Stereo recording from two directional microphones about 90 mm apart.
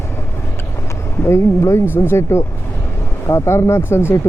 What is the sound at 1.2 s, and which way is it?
Speech, 30° left (ahead or behind).